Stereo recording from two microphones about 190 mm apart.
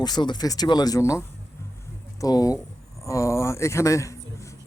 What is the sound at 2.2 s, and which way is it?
Speech, 20° left (ahead or behind).